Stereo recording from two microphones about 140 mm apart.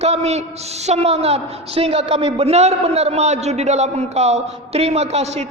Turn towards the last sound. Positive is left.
turn(degrees=-50)  # may be behind; listen again after turning